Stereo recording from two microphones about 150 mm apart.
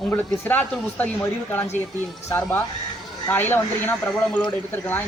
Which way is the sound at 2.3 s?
15° left (ahead or behind).